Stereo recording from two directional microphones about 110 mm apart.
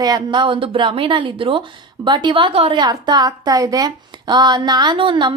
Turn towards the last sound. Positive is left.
turn(degrees=-45)  # may be behind; listen again after turning